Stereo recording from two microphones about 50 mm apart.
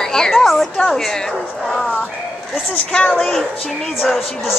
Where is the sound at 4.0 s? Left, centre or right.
Centre.